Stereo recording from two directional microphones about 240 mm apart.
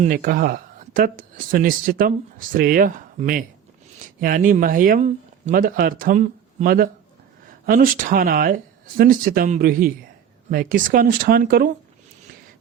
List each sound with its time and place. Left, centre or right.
0.0 s speech: right